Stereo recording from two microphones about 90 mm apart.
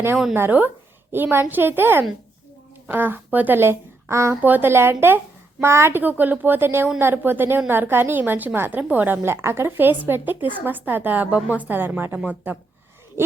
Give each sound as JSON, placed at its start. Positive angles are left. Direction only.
{"t": 0.3, "sound": "a woman's voice", "side_deg": -25}
{"t": 4.4, "sound": "a woman's voice", "side_deg": -20}